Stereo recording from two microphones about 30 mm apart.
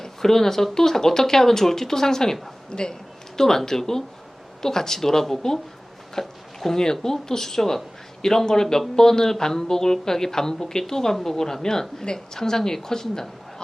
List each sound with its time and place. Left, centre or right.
0.0 s a woman's voice: centre
2.6 s speech: left
3.3 s a woman's voice: centre
5.4 s a woman's voice: centre